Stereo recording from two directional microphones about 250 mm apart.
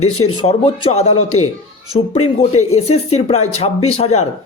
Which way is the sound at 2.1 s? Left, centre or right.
Left.